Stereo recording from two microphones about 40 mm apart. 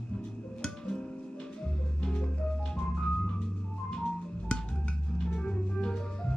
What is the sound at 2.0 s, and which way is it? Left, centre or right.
Music, left.